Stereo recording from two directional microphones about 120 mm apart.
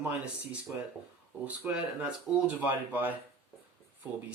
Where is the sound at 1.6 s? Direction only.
15° right (ahead or behind).